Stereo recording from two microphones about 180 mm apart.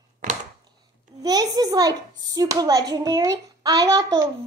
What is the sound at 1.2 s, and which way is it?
A child's voice, 20° right (ahead or behind).